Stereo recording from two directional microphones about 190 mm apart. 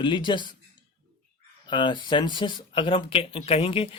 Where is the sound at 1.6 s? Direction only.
25° left (ahead or behind).